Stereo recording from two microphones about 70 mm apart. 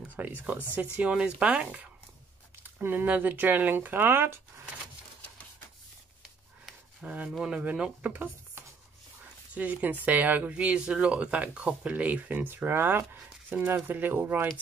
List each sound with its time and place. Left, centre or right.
0.1 s speech: right
0.9 s speech: centre
2.6 s speech: right
6.6 s a sound: centre
7.2 s speech: centre
7.5 s speech: centre
9.5 s speech: right